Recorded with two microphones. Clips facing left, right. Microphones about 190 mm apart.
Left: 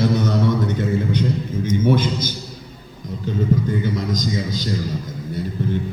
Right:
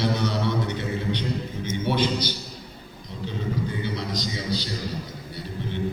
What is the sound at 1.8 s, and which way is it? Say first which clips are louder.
Speech: left 3 dB; 45° left (ahead or behind).